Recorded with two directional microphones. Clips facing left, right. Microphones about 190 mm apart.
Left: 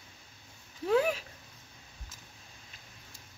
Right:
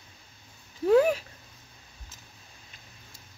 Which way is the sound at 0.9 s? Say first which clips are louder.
Right 7 dB; 40° right (ahead or behind).